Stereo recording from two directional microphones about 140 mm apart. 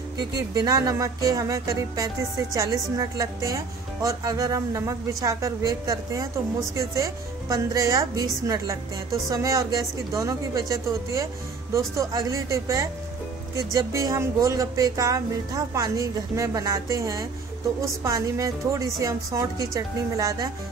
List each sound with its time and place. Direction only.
0.3 s a woman's voice: 25° right (ahead or behind)
9.3 s a woman's voice: 25° right (ahead or behind)